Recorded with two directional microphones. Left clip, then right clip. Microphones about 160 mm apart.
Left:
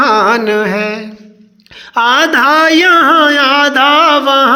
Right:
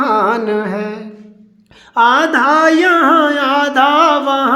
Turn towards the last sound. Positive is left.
turn(degrees=5)  # may be behind; listen again after turning